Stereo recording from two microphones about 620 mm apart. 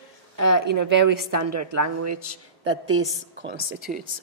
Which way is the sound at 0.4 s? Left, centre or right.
Right.